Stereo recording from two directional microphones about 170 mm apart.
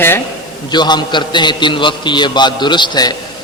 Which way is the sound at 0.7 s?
25° left (ahead or behind).